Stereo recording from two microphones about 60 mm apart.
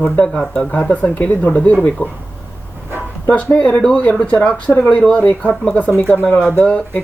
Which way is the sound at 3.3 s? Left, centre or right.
Centre.